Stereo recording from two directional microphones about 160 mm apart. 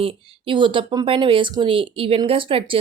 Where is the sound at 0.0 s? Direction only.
35° right (ahead or behind).